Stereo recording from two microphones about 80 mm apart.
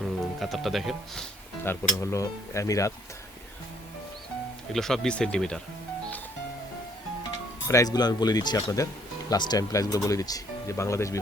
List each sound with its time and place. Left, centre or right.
0.0 s speech: centre
2.0 s speech: left
4.7 s speech: centre
7.7 s speech: left
9.3 s speech: left
9.7 s speech: left